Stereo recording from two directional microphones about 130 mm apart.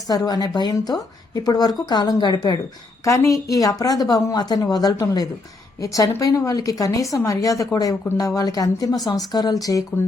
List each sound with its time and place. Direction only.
0.1 s a woman's voice: 30° left (ahead or behind)